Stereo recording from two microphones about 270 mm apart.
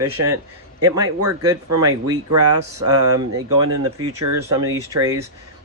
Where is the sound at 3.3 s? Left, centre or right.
Right.